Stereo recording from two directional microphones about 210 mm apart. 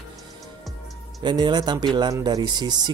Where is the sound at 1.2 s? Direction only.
20° right (ahead or behind).